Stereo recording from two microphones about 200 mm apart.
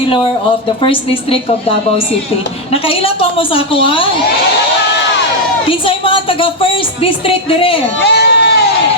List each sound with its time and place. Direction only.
0.8 s speech: 25° left (ahead or behind)
3.0 s speech: 25° left (ahead or behind)
5.6 s speech: 25° left (ahead or behind)
8.0 s crowd: 55° left (ahead or behind)